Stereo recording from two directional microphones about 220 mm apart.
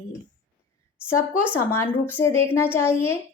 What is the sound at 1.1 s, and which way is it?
Speech, 90° left.